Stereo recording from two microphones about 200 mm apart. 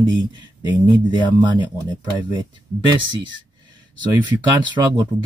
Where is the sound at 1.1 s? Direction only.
25° right (ahead or behind).